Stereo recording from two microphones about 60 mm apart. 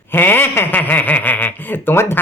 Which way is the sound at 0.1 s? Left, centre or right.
Left.